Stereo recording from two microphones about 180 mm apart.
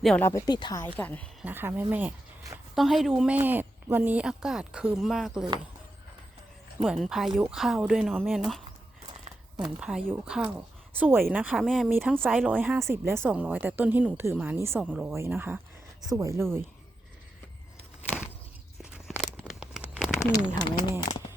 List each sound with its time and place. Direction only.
0.2 s speech: 15° left (ahead or behind)
0.9 s speech: 10° left (ahead or behind)
1.5 s a woman's voice: 10° right (ahead or behind)
2.7 s a woman's voice: centre (ahead or behind)
6.8 s a woman's voice: centre (ahead or behind)
9.8 s a woman's voice: 5° right (ahead or behind)
11.9 s a woman's voice: 10° right (ahead or behind)
12.1 s a woman's voice: centre (ahead or behind)
18.8 s biting: 5° right (ahead or behind)
19.5 s tearing: 5° right (ahead or behind)
20.1 s speech: 15° left (ahead or behind)